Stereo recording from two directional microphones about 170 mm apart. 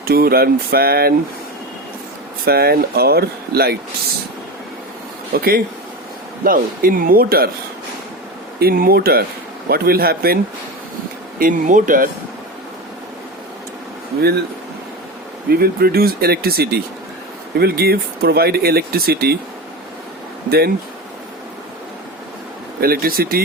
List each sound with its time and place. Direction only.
0.0 s speech: 65° right (ahead or behind)
2.4 s speech: 65° right (ahead or behind)
5.3 s speech: 60° right (ahead or behind)
8.5 s speech: 60° right (ahead or behind)
11.3 s speech: 50° right (ahead or behind)
14.2 s speech: 70° right (ahead or behind)
15.5 s speech: 65° right (ahead or behind)
22.8 s speech: 60° right (ahead or behind)